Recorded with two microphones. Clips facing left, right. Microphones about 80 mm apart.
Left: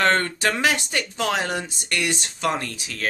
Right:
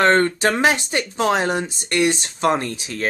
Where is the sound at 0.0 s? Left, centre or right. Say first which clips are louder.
Right 5 dB; right.